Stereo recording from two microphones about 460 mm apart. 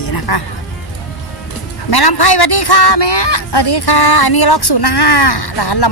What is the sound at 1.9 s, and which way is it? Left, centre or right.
Speech, left.